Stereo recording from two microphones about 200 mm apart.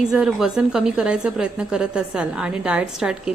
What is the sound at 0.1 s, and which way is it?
A woman's voice, centre (ahead or behind).